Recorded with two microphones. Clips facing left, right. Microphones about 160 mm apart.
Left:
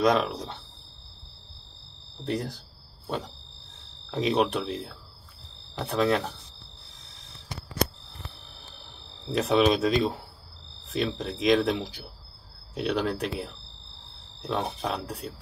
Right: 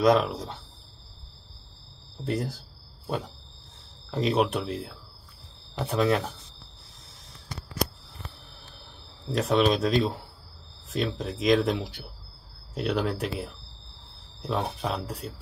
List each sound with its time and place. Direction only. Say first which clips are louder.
0.0 s speech: right 2 dB; centre (ahead or behind)
2.2 s speech: right 1 dB; 5° right (ahead or behind)
4.1 s speech: even; centre (ahead or behind)
9.3 s speech: left 1 dB; centre (ahead or behind)